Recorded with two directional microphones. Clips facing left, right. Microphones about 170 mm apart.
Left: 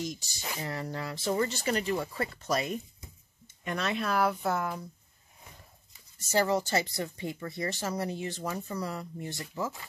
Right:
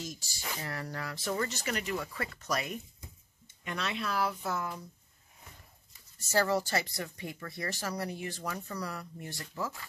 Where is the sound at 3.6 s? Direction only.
45° left (ahead or behind).